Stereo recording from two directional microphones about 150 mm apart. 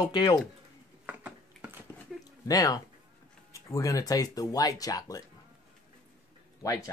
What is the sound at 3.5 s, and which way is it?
Speech, 20° left (ahead or behind).